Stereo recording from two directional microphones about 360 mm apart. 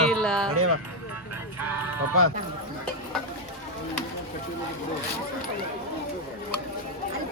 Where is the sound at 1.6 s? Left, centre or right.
Centre.